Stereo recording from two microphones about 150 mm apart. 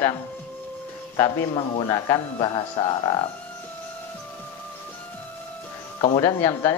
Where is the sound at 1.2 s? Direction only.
25° left (ahead or behind).